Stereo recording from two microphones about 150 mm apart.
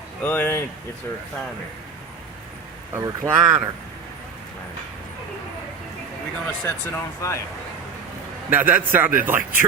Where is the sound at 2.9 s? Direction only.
15° right (ahead or behind).